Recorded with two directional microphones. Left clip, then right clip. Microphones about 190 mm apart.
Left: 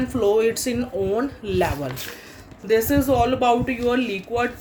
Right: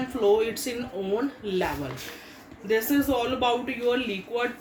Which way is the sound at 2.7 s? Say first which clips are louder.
Left 5 dB; 60° left (ahead or behind).